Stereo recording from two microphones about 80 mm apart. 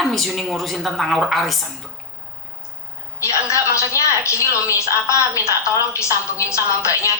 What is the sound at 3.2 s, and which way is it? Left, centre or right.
A woman's voice, left.